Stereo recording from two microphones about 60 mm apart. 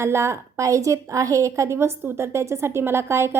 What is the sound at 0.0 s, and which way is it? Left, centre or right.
A woman's voice, right.